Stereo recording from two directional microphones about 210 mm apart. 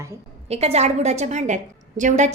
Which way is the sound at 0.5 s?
30° right (ahead or behind).